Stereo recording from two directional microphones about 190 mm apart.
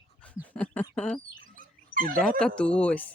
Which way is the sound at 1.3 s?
45° right (ahead or behind).